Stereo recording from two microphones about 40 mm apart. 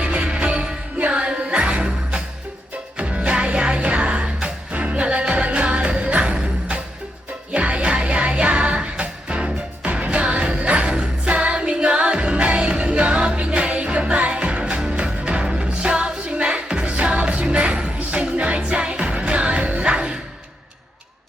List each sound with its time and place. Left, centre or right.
0.0 s music: right
7.5 s music: right